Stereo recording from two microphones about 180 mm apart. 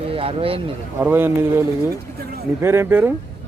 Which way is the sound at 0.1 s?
30° right (ahead or behind).